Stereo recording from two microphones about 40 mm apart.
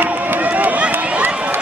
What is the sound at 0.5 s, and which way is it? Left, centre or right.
Run, right.